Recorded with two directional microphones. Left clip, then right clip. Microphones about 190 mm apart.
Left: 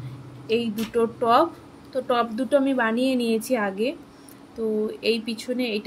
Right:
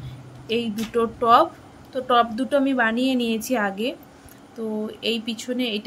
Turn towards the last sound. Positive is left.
turn(degrees=-15)  # may be behind; listen again after turning